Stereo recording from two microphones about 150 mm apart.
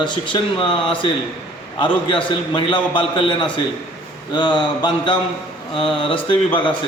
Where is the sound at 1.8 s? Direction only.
30° left (ahead or behind).